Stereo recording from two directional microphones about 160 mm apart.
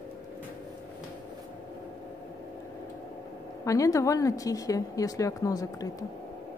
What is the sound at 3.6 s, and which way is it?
A woman's voice, 20° left (ahead or behind).